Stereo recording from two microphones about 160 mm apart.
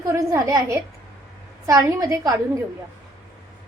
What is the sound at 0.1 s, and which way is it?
A woman's voice, 20° right (ahead or behind).